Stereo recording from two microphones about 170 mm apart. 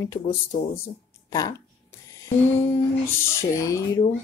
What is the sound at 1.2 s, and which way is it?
Speech, 20° left (ahead or behind).